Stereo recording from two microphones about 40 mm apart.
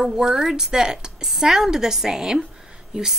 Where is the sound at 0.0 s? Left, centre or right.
Centre.